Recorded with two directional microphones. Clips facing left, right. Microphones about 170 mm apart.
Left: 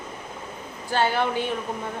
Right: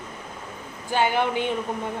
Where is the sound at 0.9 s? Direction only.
15° right (ahead or behind).